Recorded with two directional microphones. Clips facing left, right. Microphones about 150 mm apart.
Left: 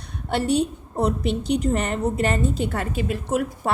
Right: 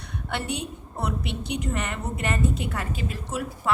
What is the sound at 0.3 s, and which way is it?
Speech, 40° left (ahead or behind).